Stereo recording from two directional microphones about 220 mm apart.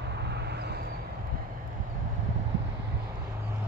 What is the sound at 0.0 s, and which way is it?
Vehicle, 50° right (ahead or behind).